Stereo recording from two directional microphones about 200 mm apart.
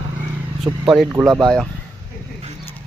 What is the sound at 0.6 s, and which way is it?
Speech, centre (ahead or behind).